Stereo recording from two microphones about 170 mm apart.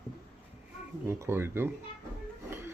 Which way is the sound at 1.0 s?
15° right (ahead or behind).